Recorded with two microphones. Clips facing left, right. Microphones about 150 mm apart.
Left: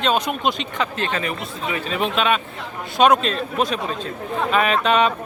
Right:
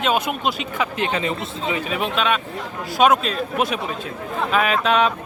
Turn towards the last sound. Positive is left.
turn(degrees=0)  # may be behind; listen again after turning